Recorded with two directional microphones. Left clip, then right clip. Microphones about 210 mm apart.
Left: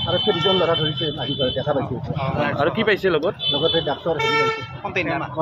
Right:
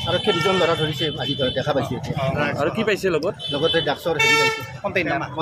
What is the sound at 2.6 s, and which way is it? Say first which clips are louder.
Speech: left 5 dB; 5° right (ahead or behind).